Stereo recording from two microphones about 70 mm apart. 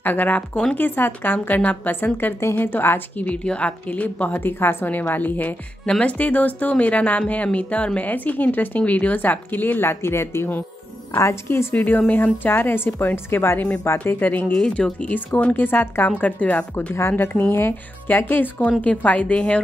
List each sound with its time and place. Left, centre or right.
0.0 s a woman's voice: left
3.3 s a woman's voice: centre
5.9 s a woman's voice: centre; by 11.7 s left
11.7 s a woman's voice: left
14.5 s a woman's voice: centre